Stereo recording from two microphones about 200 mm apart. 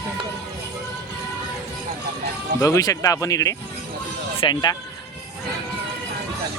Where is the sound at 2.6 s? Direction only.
15° left (ahead or behind).